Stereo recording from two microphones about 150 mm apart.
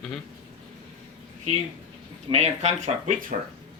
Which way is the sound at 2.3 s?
45° right (ahead or behind).